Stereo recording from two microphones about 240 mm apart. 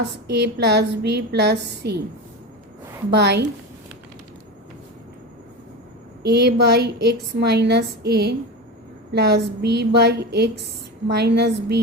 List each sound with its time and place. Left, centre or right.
0.0 s a woman's voice: right
3.1 s a woman's voice: right
6.2 s a woman's voice: right